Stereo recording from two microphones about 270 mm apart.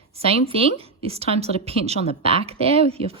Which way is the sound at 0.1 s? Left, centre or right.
Right.